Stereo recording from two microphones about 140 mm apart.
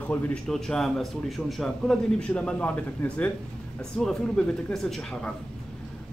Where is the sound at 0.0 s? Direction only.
10° left (ahead or behind).